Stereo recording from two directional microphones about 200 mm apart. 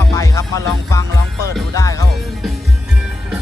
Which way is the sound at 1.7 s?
15° left (ahead or behind).